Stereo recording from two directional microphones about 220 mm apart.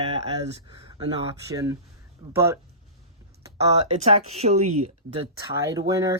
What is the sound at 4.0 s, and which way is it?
Speech, 30° right (ahead or behind).